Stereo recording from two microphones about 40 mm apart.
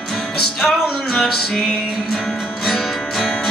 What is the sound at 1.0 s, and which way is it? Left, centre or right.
Music, centre.